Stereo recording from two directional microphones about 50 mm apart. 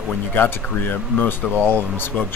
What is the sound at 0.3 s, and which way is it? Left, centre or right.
Speech, left.